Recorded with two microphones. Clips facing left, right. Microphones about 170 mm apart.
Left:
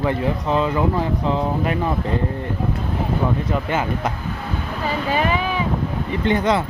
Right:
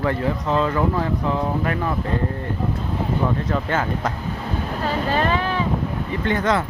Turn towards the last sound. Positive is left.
turn(degrees=15)  # may be behind; listen again after turning